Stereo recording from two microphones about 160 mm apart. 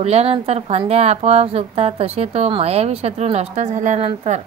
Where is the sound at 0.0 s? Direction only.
40° right (ahead or behind).